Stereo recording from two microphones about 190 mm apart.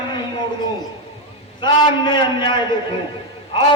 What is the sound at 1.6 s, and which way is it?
A man's voice, 25° left (ahead or behind).